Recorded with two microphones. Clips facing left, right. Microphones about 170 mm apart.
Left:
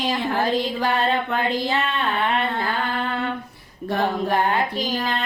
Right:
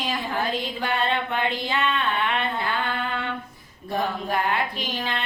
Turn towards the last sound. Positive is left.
turn(degrees=35)  # may be behind; listen again after turning